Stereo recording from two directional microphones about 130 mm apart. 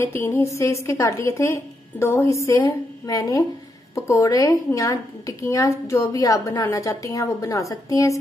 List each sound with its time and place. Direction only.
0.0 s a woman's voice: 20° left (ahead or behind)